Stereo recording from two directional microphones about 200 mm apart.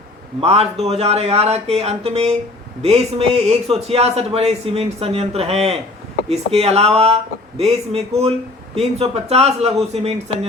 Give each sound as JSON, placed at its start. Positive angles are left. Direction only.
{"t": 0.3, "sound": "a man's voice", "side_deg": -30}